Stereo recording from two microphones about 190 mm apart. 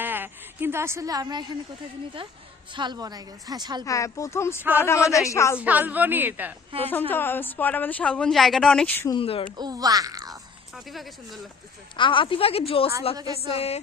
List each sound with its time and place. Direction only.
0.0 s a sound: 10° right (ahead or behind)
2.7 s a woman's voice: 25° right (ahead or behind)
3.8 s speech: 15° left (ahead or behind)
5.5 s a woman's voice: 10° right (ahead or behind)
6.7 s a woman's voice: 30° right (ahead or behind)
7.1 s speech: 10° left (ahead or behind)
9.1 s a woman's voice: 30° left (ahead or behind)
9.6 s a woman's voice: 20° right (ahead or behind)
11.9 s a woman's voice: 25° left (ahead or behind)
13.4 s music: 30° left (ahead or behind)